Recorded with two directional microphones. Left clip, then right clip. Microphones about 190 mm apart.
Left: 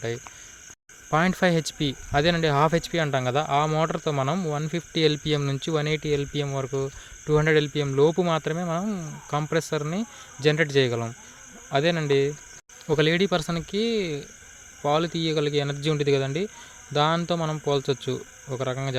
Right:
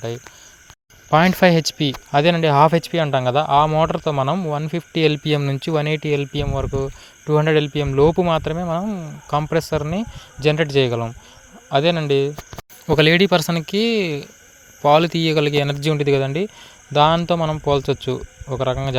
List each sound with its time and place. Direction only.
1.1 s speech: 35° right (ahead or behind)
12.9 s speech: 40° right (ahead or behind)